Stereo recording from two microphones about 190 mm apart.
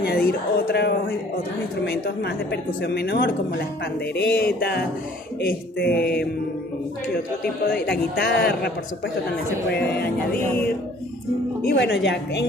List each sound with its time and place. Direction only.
0.0 s a woman's voice: 55° left (ahead or behind)
7.7 s a woman's voice: 55° left (ahead or behind)
11.6 s a woman's voice: 60° left (ahead or behind)